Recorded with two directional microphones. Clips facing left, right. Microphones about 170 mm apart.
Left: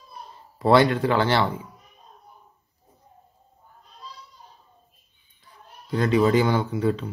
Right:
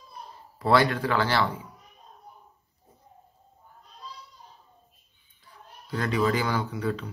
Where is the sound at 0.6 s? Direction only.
25° left (ahead or behind).